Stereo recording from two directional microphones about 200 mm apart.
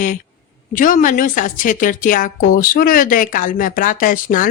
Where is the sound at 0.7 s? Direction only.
40° left (ahead or behind).